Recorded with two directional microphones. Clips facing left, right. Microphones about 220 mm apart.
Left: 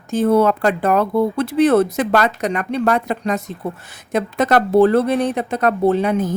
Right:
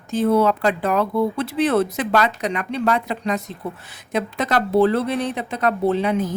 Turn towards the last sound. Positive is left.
turn(degrees=45)  # may be behind; listen again after turning